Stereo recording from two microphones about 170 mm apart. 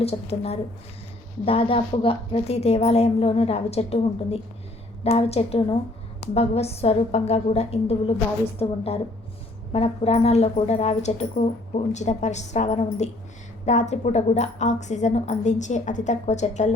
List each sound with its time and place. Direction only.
0.0 s a woman's voice: 35° left (ahead or behind)